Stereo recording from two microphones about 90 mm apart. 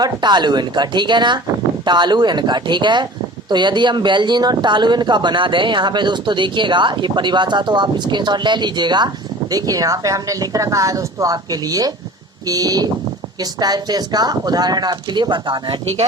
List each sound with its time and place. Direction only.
0.0 s speech: 55° right (ahead or behind)
9.5 s a woman's voice: 45° right (ahead or behind); by 15.8 s 60° right (ahead or behind)